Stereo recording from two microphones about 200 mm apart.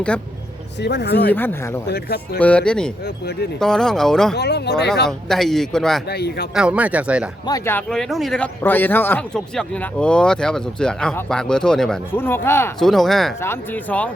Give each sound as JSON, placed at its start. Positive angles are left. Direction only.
{"t": 0.8, "sound": "speech", "side_deg": 60}
{"t": 1.3, "sound": "speech", "side_deg": 10}
{"t": 1.9, "sound": "speech", "side_deg": 55}
{"t": 2.4, "sound": "speech", "side_deg": 5}
{"t": 4.4, "sound": "speech", "side_deg": 55}
{"t": 5.0, "sound": "speech", "side_deg": 0}
{"t": 6.1, "sound": "speech", "side_deg": 55}
{"t": 6.5, "sound": "speech", "side_deg": -5}
{"t": 7.4, "sound": "speech", "side_deg": 15}
{"t": 12.8, "sound": "speech", "side_deg": 0}